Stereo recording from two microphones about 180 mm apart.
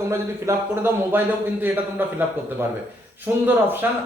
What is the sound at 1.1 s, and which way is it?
Speech, 10° right (ahead or behind).